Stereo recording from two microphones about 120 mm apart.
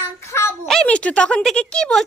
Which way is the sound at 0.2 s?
20° left (ahead or behind).